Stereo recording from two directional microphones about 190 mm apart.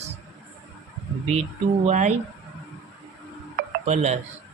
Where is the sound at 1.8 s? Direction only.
40° right (ahead or behind).